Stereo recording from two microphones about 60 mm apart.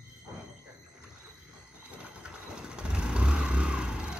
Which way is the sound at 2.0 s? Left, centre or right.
Right.